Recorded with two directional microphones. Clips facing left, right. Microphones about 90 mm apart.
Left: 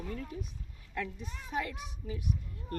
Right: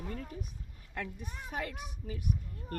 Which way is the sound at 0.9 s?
50° right (ahead or behind).